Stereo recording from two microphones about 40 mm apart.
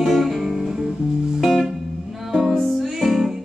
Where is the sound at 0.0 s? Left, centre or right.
Centre.